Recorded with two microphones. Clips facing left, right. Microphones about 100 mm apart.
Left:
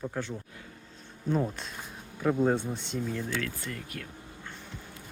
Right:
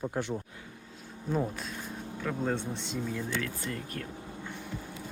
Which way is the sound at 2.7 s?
Centre (ahead or behind).